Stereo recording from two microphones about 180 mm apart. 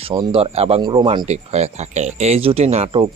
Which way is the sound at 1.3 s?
35° right (ahead or behind).